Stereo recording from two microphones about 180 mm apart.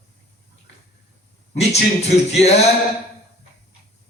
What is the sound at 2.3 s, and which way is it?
Speech, 35° left (ahead or behind).